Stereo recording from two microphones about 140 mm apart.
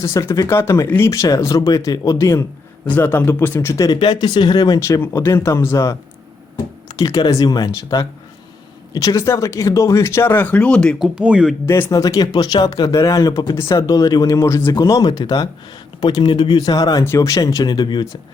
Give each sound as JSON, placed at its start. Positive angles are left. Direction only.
{"t": 0.0, "sound": "speech", "side_deg": 20}
{"t": 3.8, "sound": "speech", "side_deg": 30}
{"t": 11.1, "sound": "speech", "side_deg": -5}
{"t": 11.6, "sound": "speech", "side_deg": 20}